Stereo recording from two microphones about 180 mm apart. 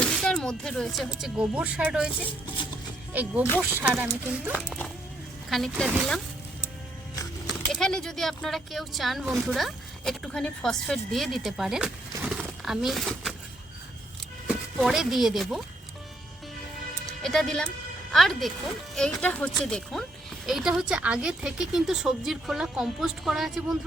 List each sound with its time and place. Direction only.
0.0 s music: 5° left (ahead or behind)
1.2 s speech: 5° right (ahead or behind)
3.1 s speech: 10° right (ahead or behind)
4.5 s a woman's voice: 10° left (ahead or behind)
7.4 s a woman's voice: 5° left (ahead or behind)
12.4 s a sound: centre (ahead or behind)
14.4 s speech: 5° right (ahead or behind)
17.1 s a woman's voice: centre (ahead or behind)